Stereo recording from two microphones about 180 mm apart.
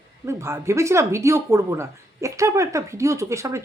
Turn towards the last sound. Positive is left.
turn(degrees=-15)  # may be behind; listen again after turning